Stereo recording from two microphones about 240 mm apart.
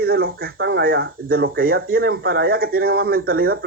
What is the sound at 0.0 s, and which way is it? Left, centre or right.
A man's voice, right.